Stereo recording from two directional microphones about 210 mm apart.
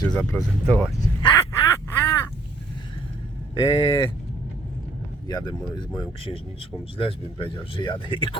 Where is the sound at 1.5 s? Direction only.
15° left (ahead or behind).